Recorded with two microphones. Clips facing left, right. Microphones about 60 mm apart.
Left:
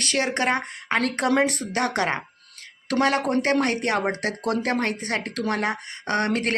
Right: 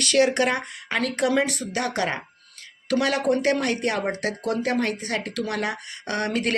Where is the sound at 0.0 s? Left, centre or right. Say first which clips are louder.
Right 4 dB; left.